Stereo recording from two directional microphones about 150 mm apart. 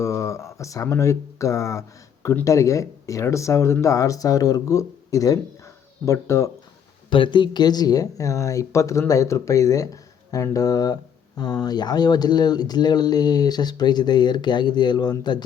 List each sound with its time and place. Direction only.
0.0 s speech: 20° left (ahead or behind)
7.1 s speech: 35° left (ahead or behind)